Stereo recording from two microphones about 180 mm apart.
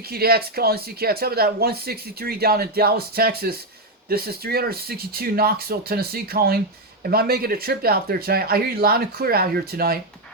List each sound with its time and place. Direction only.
0.1 s speech: 60° right (ahead or behind)